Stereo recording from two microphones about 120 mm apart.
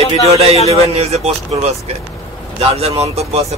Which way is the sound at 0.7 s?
60° right (ahead or behind).